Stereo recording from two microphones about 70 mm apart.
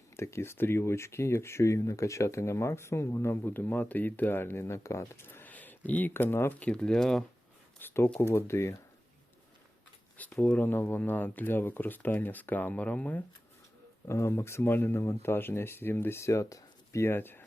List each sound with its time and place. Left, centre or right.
0.2 s speech: left
6.6 s speech: centre
7.8 s speech: left
10.4 s speech: left
14.1 s speech: left
17.1 s speech: left